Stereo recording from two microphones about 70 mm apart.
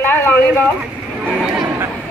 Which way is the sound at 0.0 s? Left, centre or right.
Left.